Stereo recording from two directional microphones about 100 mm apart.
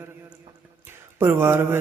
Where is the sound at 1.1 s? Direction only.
25° right (ahead or behind).